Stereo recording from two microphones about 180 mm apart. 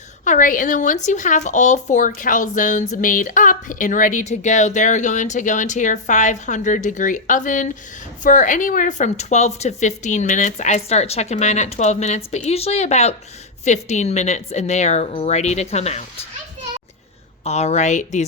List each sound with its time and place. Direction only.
0.3 s a woman's voice: 50° left (ahead or behind)
17.4 s a woman's voice: 35° left (ahead or behind)